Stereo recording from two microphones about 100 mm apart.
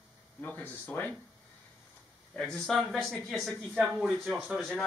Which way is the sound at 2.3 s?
5° left (ahead or behind).